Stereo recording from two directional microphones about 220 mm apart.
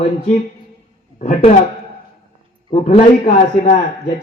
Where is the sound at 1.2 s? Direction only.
30° left (ahead or behind).